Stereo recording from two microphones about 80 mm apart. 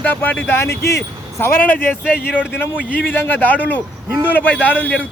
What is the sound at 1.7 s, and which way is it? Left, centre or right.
A man's voice, left.